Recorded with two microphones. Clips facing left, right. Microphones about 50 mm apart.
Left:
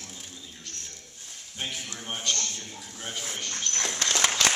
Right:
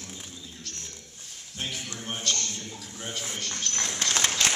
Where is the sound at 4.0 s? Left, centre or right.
Left.